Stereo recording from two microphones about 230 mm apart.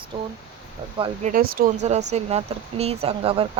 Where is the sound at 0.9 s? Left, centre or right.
Right.